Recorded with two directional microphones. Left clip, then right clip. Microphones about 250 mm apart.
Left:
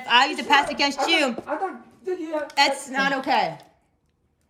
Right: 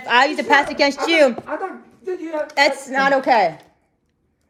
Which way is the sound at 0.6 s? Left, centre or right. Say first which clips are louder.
Right 3 dB; right.